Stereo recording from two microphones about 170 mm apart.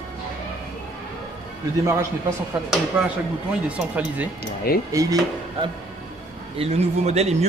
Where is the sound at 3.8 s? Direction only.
10° right (ahead or behind).